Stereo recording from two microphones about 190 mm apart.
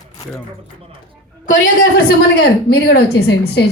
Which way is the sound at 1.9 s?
60° left (ahead or behind).